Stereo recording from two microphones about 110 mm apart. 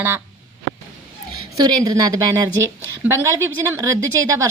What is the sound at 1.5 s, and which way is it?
A woman's voice, 35° right (ahead or behind).